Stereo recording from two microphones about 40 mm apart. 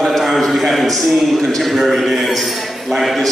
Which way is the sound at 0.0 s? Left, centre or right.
Centre.